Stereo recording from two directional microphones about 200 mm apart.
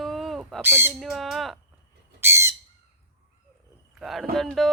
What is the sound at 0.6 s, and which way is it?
Speech, 10° right (ahead or behind).